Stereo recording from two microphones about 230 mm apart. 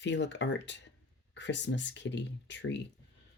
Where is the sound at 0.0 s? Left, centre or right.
Left.